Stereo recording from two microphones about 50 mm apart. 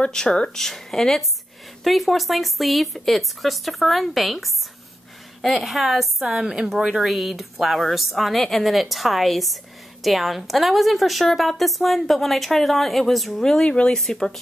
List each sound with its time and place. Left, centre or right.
0.0 s a woman's voice: centre
7.1 s a woman's voice: centre
13.4 s speech: centre
13.9 s a woman's voice: centre